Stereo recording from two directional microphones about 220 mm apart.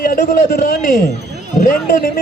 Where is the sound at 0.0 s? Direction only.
40° left (ahead or behind).